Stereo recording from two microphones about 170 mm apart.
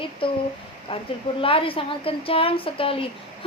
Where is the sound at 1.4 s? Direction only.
30° left (ahead or behind).